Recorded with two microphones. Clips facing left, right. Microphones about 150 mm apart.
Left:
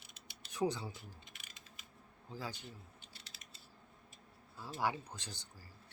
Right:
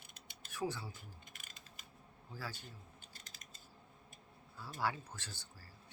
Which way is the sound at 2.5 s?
45° right (ahead or behind).